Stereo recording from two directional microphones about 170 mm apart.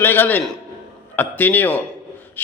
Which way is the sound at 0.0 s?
10° left (ahead or behind).